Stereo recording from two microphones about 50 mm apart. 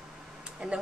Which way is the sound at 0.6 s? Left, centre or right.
Right.